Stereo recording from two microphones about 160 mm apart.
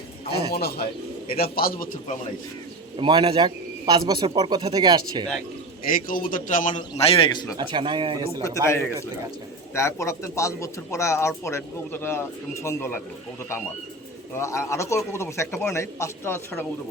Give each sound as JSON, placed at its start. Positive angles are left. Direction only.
{"t": 0.5, "sound": "a man's voice", "side_deg": 80}
{"t": 3.0, "sound": "a man's voice", "side_deg": -30}
{"t": 5.9, "sound": "a man's voice", "side_deg": 60}
{"t": 7.6, "sound": "speech", "side_deg": -30}
{"t": 8.4, "sound": "a man's voice", "side_deg": 20}
{"t": 14.3, "sound": "a man's voice", "side_deg": 15}